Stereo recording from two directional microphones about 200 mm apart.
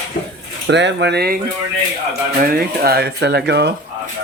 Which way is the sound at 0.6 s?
60° right (ahead or behind).